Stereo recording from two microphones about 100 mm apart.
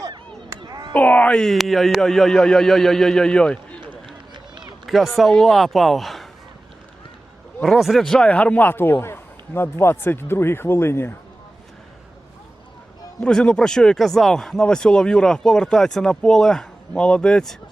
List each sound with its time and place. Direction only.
0.5 s a sound: 40° right (ahead or behind)
0.9 s speech: 15° left (ahead or behind)
4.9 s speech: centre (ahead or behind)
7.6 s a man's voice: centre (ahead or behind); by 11.1 s 25° left (ahead or behind)
13.1 s speech: 10° left (ahead or behind)